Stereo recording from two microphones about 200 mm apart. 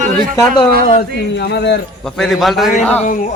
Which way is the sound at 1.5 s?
55° left (ahead or behind).